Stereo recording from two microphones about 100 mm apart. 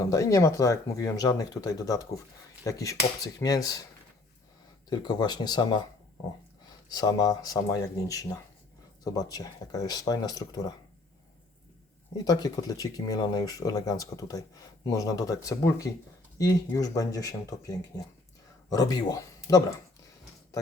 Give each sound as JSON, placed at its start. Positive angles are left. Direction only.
{"t": 0.0, "sound": "speech", "side_deg": 35}
{"t": 4.9, "sound": "speech", "side_deg": 40}
{"t": 6.8, "sound": "speech", "side_deg": 40}
{"t": 12.1, "sound": "speech", "side_deg": 40}